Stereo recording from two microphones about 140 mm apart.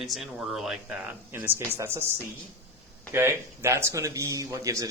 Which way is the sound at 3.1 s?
20° right (ahead or behind).